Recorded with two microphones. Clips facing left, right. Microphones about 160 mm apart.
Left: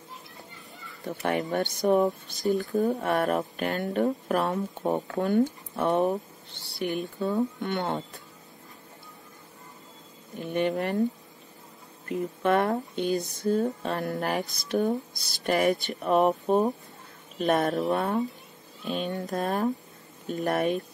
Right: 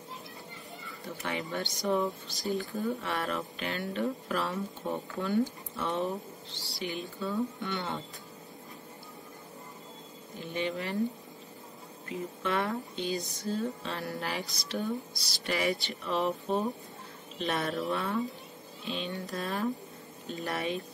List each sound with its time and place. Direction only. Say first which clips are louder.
1.0 s speech: left 8 dB; 50° left (ahead or behind)
10.3 s speech: left 7 dB; 55° left (ahead or behind)
12.1 s speech: left 8 dB; 55° left (ahead or behind)